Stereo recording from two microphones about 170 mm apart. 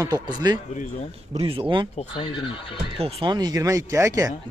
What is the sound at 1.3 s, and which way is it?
Speech, 30° right (ahead or behind).